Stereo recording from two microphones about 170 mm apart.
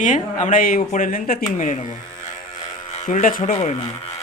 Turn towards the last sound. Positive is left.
turn(degrees=45)  # may be behind; listen again after turning